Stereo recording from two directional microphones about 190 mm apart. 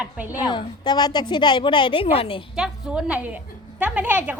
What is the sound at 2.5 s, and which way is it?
A woman's voice, 5° right (ahead or behind).